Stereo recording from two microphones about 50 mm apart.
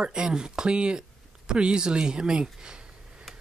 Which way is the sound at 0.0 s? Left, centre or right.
Centre.